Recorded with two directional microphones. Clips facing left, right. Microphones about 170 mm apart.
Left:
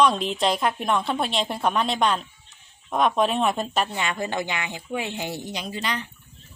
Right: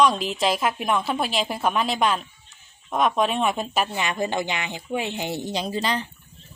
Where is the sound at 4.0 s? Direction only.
20° right (ahead or behind).